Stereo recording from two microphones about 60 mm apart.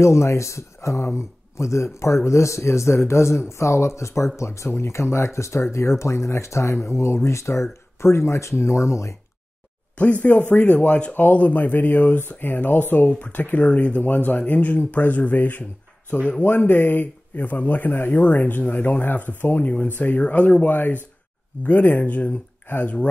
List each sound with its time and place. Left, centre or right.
0.0 s speech: left
9.9 s speech: left